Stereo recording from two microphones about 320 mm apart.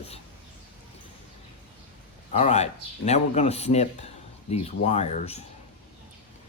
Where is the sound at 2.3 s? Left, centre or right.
Left.